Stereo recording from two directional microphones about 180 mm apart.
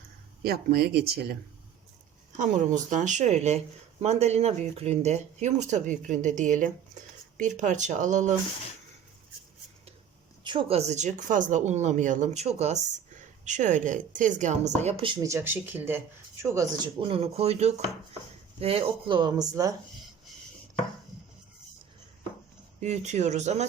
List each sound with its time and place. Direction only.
0.4 s speech: 60° right (ahead or behind)
2.4 s speech: 45° right (ahead or behind)
10.4 s speech: 25° right (ahead or behind)
15.3 s speech: 10° right (ahead or behind)
17.0 s speech: 30° right (ahead or behind)
22.8 s speech: 40° right (ahead or behind)